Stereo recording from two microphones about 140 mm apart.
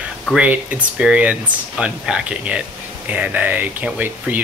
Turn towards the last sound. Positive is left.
turn(degrees=-10)  # may be behind; listen again after turning